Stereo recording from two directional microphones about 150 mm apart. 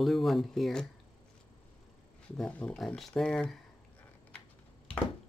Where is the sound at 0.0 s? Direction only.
Centre (ahead or behind).